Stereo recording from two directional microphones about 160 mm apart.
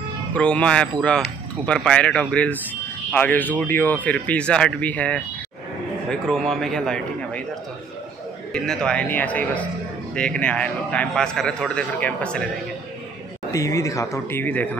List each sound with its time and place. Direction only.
0.3 s a man's voice: 5° left (ahead or behind)
8.5 s a man's voice: 5° left (ahead or behind)
13.5 s a man's voice: 20° left (ahead or behind)